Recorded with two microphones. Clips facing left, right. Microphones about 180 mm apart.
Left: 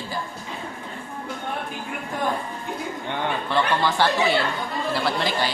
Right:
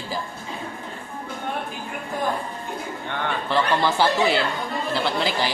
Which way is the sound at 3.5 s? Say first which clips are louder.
Right 2 dB; 5° right (ahead or behind).